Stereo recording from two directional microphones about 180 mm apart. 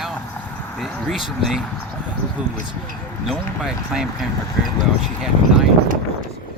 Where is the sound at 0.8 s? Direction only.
Centre (ahead or behind).